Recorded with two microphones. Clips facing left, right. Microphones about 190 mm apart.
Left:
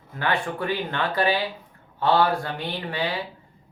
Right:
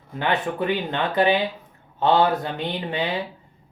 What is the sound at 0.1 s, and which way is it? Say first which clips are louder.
Speech: right 2 dB; 20° right (ahead or behind).